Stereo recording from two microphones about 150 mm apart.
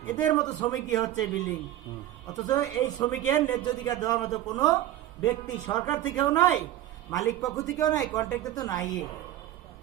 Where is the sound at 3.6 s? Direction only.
25° left (ahead or behind).